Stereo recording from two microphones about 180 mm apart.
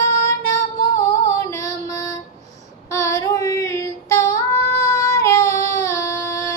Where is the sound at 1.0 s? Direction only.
15° left (ahead or behind).